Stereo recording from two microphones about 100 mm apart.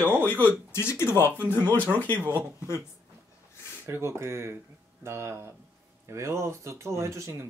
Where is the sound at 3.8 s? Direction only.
25° right (ahead or behind).